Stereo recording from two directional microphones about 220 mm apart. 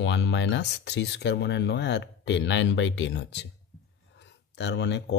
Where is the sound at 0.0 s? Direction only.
55° left (ahead or behind).